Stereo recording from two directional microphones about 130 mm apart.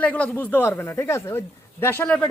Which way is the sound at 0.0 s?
10° left (ahead or behind).